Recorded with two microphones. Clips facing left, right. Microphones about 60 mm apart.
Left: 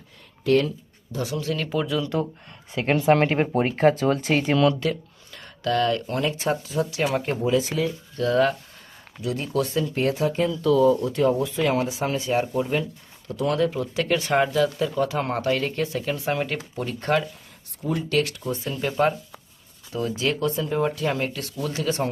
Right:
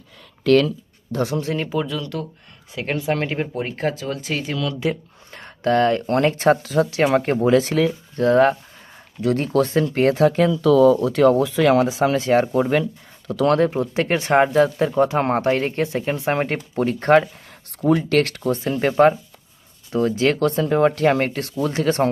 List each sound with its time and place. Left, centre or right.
0.4 s speech: right
1.2 s speech: right
1.7 s speech: centre
2.0 s speech: centre
2.9 s speech: left
3.2 s speech: left
4.8 s speech: centre
5.3 s a sound: right
6.1 s speech: right
7.9 s speech: right
9.2 s speech: right
10.2 s speech: right
13.6 s speech: right
17.8 s speech: right